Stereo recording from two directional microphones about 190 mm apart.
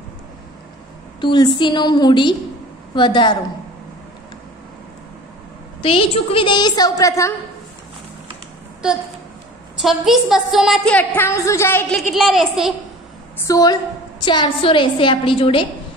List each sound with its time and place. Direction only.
1.2 s a woman's voice: 25° left (ahead or behind)
5.8 s a woman's voice: 30° left (ahead or behind)
9.8 s a woman's voice: centre (ahead or behind)
12.0 s a woman's voice: centre (ahead or behind)
13.5 s a woman's voice: 20° left (ahead or behind)